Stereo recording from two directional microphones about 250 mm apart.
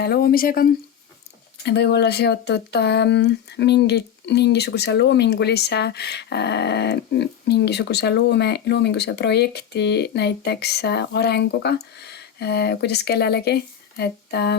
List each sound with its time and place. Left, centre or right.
0.0 s speech: left